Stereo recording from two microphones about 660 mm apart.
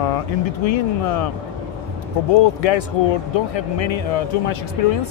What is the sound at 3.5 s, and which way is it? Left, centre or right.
Speech, left.